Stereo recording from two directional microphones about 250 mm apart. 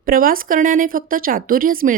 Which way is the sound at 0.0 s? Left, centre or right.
Right.